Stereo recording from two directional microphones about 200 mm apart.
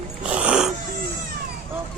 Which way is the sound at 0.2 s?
5° right (ahead or behind).